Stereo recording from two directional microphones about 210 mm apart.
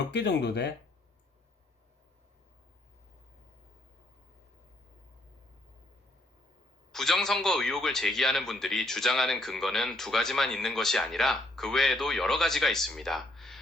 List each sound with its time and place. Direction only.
0.1 s speech: 55° left (ahead or behind)
6.9 s a man's voice: centre (ahead or behind)